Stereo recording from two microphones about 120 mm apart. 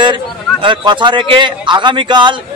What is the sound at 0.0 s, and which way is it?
A man's voice, 40° right (ahead or behind).